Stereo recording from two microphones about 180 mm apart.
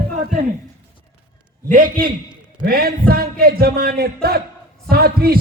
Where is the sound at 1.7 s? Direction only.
50° right (ahead or behind).